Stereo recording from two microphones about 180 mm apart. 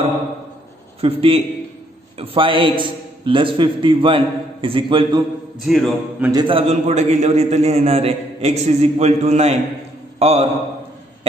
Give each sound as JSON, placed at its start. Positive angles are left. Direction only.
{"t": 1.0, "sound": "a man's voice", "side_deg": -30}
{"t": 5.6, "sound": "mantra", "side_deg": -5}
{"t": 6.3, "sound": "a man's voice", "side_deg": -30}